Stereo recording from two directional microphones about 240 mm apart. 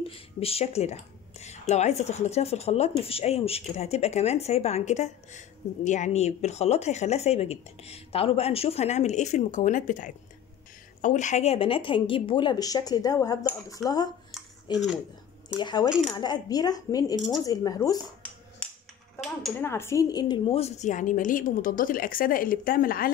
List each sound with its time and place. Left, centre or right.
0.1 s speech: left
18.6 s a sound: centre
19.2 s speech: centre
19.7 s a woman's voice: centre; by 23.1 s left